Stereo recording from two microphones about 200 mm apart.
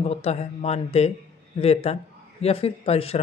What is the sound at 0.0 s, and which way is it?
Speech, 30° left (ahead or behind).